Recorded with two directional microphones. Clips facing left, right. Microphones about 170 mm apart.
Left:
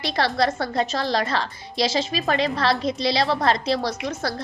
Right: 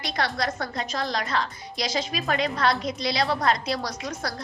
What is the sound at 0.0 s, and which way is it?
A woman's voice, 30° left (ahead or behind).